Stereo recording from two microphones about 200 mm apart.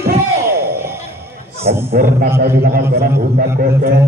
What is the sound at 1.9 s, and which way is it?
A man's voice, 45° right (ahead or behind).